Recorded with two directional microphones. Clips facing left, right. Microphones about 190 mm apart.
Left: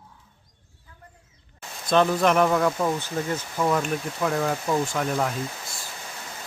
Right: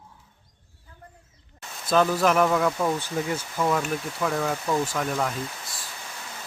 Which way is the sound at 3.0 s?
10° right (ahead or behind).